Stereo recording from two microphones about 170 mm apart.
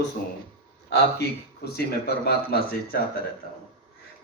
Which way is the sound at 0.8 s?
70° left (ahead or behind).